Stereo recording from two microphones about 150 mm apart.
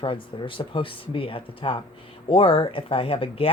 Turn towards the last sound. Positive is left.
turn(degrees=40)  # may be behind; listen again after turning